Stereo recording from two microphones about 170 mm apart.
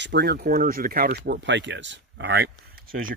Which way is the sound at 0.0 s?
80° right.